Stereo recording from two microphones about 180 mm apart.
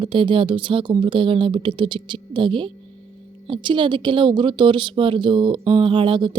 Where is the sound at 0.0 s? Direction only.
30° right (ahead or behind).